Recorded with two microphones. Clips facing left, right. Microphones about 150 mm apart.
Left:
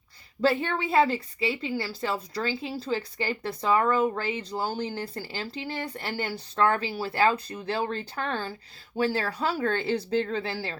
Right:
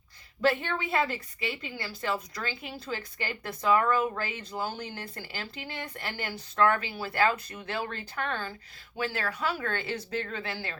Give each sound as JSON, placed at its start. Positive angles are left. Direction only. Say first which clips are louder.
{"t": 0.4, "sound": "a woman's voice", "louder": "left 3 dB", "side_deg": 30}